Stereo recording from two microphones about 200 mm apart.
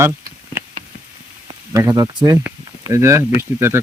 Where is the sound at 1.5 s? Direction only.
15° right (ahead or behind).